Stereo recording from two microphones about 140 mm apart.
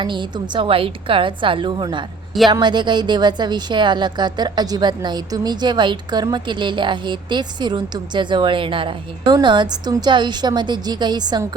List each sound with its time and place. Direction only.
0.0 s a woman's voice: 35° right (ahead or behind)